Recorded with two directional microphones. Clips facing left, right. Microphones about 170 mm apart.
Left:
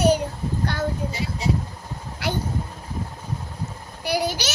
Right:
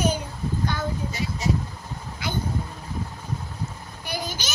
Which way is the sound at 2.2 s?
70° left (ahead or behind).